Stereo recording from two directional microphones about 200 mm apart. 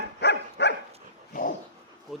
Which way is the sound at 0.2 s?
55° left (ahead or behind).